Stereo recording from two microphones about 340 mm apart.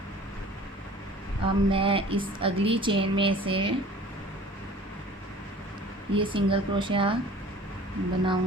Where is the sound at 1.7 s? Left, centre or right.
Centre.